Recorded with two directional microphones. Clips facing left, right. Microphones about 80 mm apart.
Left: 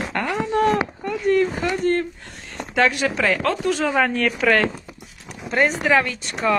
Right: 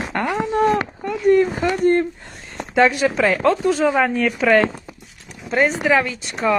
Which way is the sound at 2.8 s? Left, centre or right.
Right.